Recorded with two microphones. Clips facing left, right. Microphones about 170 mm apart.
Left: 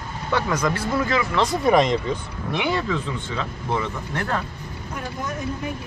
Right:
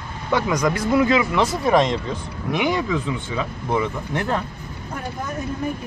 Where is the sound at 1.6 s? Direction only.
Centre (ahead or behind).